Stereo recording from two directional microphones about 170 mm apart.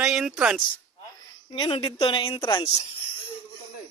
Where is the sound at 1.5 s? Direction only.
30° left (ahead or behind).